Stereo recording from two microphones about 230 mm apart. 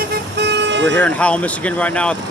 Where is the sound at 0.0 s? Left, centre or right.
Right.